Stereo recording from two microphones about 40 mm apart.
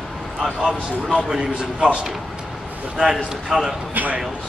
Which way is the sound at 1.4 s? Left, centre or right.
Right.